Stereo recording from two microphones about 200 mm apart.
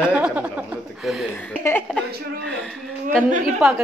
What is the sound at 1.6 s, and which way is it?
Speech, 10° left (ahead or behind).